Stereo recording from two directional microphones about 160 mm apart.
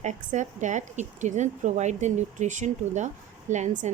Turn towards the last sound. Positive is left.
turn(degrees=-50)  # may be behind; listen again after turning